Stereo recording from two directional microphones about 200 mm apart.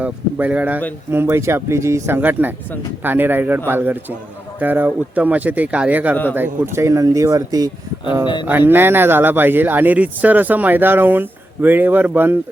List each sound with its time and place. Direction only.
0.0 s a man's voice: 10° right (ahead or behind)